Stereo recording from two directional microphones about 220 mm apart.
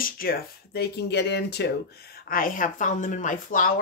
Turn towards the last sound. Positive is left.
turn(degrees=35)  # may be behind; listen again after turning